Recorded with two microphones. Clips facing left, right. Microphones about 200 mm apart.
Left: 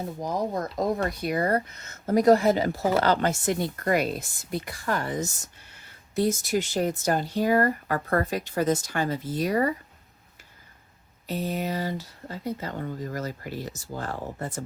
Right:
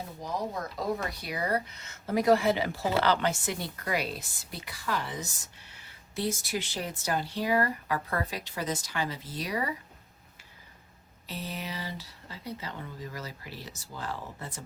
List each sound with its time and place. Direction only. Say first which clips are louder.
0.2 s speech: left 5 dB; 45° left (ahead or behind)
11.3 s speech: left 9 dB; 45° left (ahead or behind)